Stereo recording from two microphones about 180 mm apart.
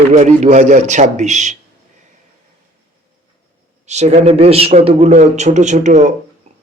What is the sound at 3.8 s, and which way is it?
Speech, 40° right (ahead or behind).